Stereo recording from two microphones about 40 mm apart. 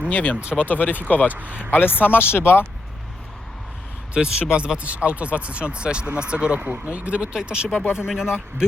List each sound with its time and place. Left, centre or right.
0.1 s speech: left
1.3 s speech: right
2.0 s speech: left
4.1 s speech: right
6.7 s speech: right
7.3 s speech: centre